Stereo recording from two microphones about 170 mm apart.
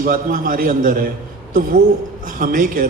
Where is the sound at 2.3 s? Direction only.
55° right (ahead or behind).